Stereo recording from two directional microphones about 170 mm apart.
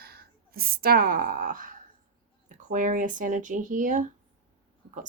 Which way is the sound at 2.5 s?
50° right (ahead or behind).